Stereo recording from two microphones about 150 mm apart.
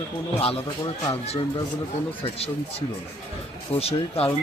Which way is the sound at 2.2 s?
40° left (ahead or behind).